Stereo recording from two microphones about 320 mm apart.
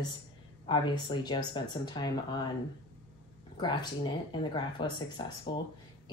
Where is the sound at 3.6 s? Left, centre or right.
Centre.